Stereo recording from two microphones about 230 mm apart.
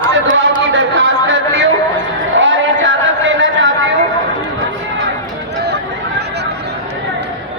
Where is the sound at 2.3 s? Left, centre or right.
Right.